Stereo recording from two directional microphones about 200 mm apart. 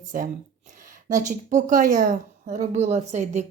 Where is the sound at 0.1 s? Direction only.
45° right (ahead or behind).